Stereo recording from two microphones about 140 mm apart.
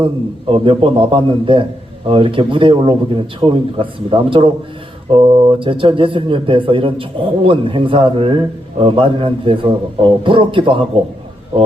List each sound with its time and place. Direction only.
0.5 s speech: 40° right (ahead or behind)